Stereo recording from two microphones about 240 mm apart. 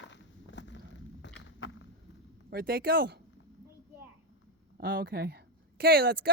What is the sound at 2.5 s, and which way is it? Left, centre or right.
Speech, right.